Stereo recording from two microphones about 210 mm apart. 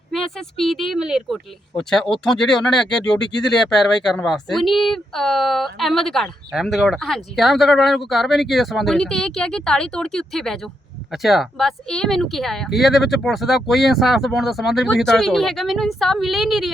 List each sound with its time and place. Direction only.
0.1 s speech: centre (ahead or behind)